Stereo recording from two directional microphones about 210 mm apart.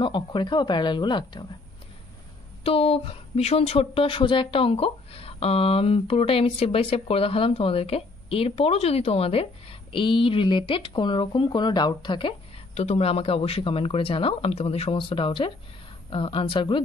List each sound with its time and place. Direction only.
0.0 s a woman's voice: 25° left (ahead or behind)
2.6 s a woman's voice: 30° left (ahead or behind)